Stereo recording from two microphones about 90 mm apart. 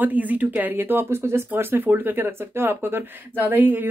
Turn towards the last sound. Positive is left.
turn(degrees=-20)  # may be behind; listen again after turning